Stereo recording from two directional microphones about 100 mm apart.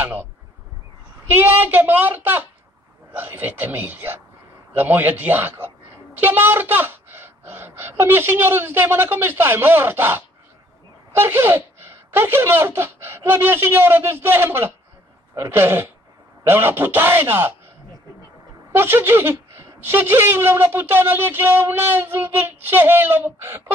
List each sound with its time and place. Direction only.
0.0 s a sound: 20° right (ahead or behind)
1.2 s speech: 20° right (ahead or behind)
18.7 s speech: 20° right (ahead or behind)